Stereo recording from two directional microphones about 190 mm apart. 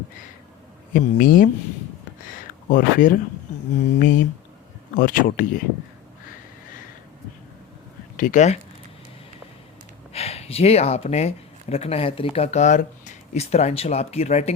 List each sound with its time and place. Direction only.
0.9 s speech: 45° left (ahead or behind)
2.6 s speech: 45° left (ahead or behind)
8.1 s speech: 45° left (ahead or behind)
10.1 s speech: 35° left (ahead or behind)